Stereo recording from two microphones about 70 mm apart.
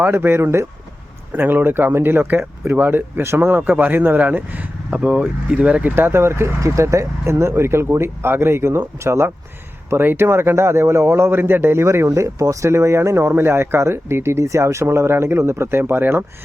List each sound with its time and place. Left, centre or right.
0.1 s a man's voice: right
1.3 s a man's voice: right
5.9 s a man's voice: right